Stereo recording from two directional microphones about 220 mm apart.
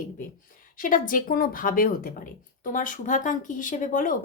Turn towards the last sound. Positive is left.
turn(degrees=40)  # may be behind; listen again after turning